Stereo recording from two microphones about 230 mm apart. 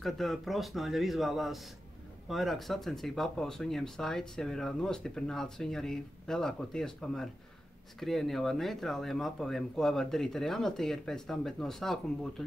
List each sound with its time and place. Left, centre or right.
0.0 s speech: centre